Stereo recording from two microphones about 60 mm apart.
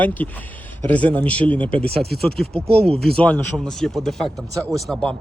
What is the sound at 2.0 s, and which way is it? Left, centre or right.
Speech, centre.